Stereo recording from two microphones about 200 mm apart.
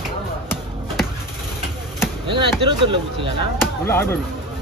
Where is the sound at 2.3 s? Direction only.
25° right (ahead or behind).